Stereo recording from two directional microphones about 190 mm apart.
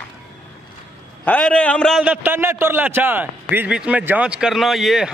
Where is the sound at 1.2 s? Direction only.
5° left (ahead or behind).